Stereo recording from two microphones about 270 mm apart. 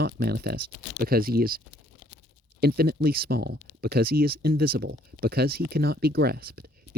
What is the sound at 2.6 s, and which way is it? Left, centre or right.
Speech, right.